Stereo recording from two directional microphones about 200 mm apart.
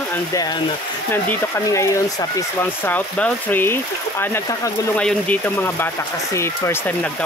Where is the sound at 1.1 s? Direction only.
10° left (ahead or behind).